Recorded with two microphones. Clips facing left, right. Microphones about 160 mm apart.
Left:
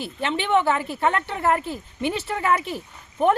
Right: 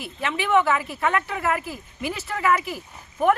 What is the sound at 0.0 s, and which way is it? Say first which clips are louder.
Speech: left 2 dB; 30° left (ahead or behind).